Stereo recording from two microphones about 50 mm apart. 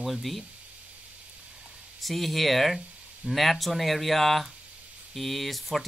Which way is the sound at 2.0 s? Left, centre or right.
Centre.